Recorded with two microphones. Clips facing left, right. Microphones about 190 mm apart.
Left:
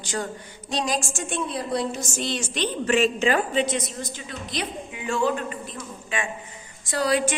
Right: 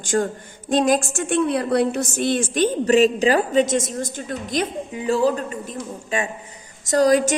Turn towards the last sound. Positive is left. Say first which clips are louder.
# right 7 dB
turn(degrees=-45)  # may be behind; listen again after turning